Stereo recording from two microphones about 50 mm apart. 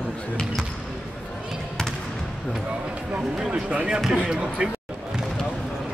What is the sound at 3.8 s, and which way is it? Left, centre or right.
Speech, centre.